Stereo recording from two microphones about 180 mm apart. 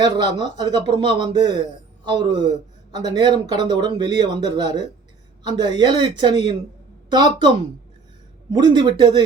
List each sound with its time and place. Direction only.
0.0 s speech: 25° right (ahead or behind)
8.5 s speech: 25° right (ahead or behind)